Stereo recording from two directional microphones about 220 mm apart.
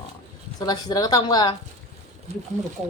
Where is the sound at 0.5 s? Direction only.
15° left (ahead or behind).